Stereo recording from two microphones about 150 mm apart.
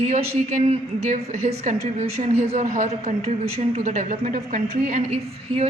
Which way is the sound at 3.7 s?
50° right (ahead or behind).